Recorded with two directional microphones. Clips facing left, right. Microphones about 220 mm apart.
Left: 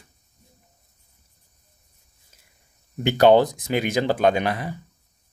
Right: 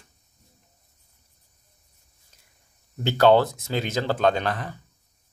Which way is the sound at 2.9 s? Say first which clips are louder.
Left 2 dB; 15° left (ahead or behind).